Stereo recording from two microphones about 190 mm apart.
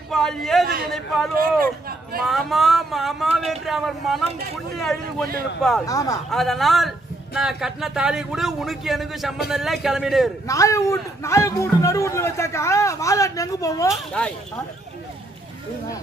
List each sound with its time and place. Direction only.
0.1 s a man's voice: 5° left (ahead or behind)
1.6 s speech: 50° right (ahead or behind)
2.2 s speech: centre (ahead or behind)
5.6 s speech: 5° left (ahead or behind)
5.9 s speech: 20° left (ahead or behind)
6.3 s speech: centre (ahead or behind)
10.5 s speech: 15° left (ahead or behind)
14.2 s speech: 5° left (ahead or behind)